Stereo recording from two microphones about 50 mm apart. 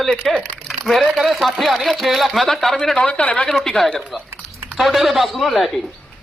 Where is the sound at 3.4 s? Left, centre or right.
Centre.